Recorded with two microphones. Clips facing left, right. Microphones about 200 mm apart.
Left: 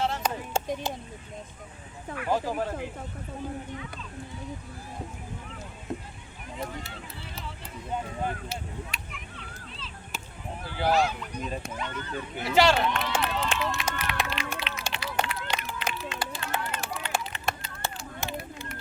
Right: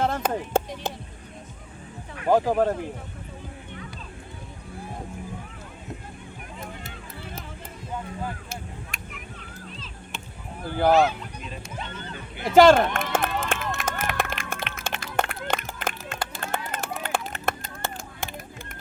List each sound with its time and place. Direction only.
0.0 s music: 50° right (ahead or behind)
2.2 s speech: 50° right (ahead or behind)
8.4 s a sound: 45° right (ahead or behind)
10.7 s speech: 50° right (ahead or behind)
12.4 s run: 50° right (ahead or behind)
16.7 s a sound: 50° right (ahead or behind)